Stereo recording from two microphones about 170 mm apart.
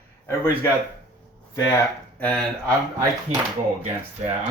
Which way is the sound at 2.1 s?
10° left (ahead or behind).